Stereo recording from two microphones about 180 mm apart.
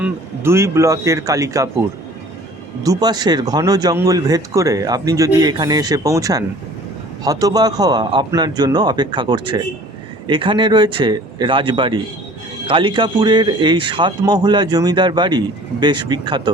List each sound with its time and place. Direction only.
0.0 s speech: 15° right (ahead or behind)
2.8 s speech: 20° right (ahead or behind)